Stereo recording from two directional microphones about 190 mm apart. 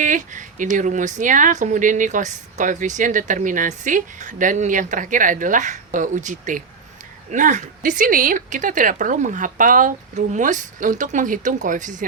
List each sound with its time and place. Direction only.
0.0 s speech: 40° right (ahead or behind)